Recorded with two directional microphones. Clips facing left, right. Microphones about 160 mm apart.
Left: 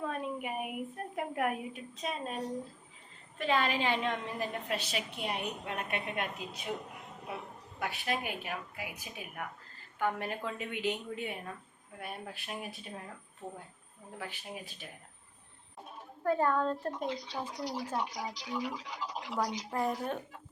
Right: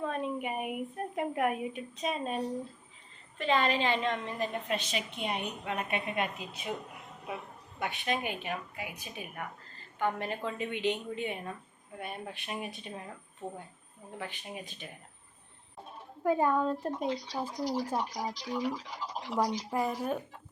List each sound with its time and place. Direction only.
0.0 s a woman's voice: 5° left (ahead or behind)
7.8 s speech: centre (ahead or behind)
13.4 s speech: 20° right (ahead or behind)
14.2 s speech: 5° left (ahead or behind)
16.2 s speech: 15° right (ahead or behind)
17.2 s speech: 40° right (ahead or behind)
19.7 s speech: 10° right (ahead or behind)